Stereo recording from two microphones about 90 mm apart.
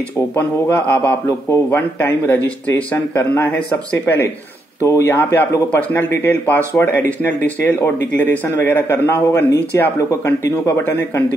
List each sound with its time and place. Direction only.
0.4 s speech: 20° left (ahead or behind)